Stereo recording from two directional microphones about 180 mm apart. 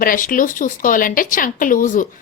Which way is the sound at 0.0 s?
50° left (ahead or behind).